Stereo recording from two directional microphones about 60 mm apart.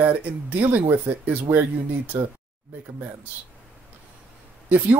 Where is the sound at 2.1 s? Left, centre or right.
Right.